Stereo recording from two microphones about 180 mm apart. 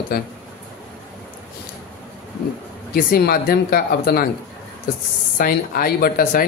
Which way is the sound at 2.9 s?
55° left (ahead or behind).